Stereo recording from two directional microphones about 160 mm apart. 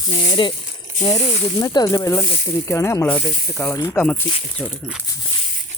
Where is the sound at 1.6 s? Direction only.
25° left (ahead or behind).